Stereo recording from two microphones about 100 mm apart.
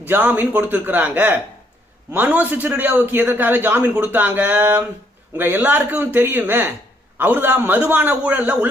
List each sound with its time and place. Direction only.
0.1 s a man's voice: 20° right (ahead or behind)